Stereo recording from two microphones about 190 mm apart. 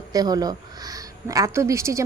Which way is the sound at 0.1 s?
20° right (ahead or behind).